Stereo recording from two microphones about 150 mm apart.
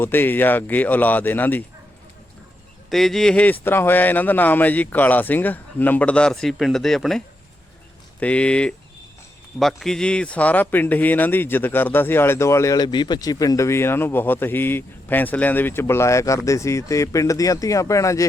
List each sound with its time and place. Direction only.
0.0 s a man's voice: 15° left (ahead or behind)
2.9 s a man's voice: centre (ahead or behind)
8.2 s a man's voice: 5° left (ahead or behind)